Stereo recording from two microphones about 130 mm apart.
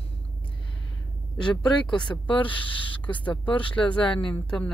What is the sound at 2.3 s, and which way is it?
Speech, 40° left (ahead or behind).